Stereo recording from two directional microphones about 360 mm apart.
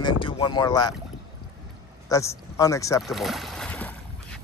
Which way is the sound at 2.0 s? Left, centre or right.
Centre.